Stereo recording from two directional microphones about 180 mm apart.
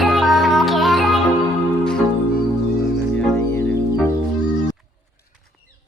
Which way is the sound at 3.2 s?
10° left (ahead or behind).